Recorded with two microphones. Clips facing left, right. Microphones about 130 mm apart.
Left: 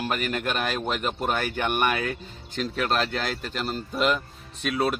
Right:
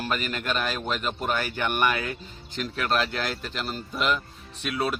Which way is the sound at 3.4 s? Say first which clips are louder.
Left 2 dB; 40° left (ahead or behind).